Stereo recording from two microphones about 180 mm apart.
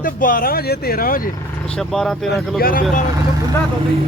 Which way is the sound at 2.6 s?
50° left (ahead or behind).